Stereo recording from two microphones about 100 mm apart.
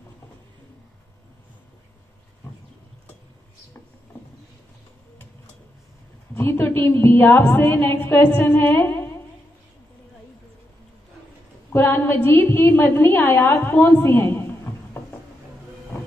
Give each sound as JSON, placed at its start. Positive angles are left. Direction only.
{"t": 6.3, "sound": "a woman's voice", "side_deg": 25}
{"t": 11.7, "sound": "a woman's voice", "side_deg": 20}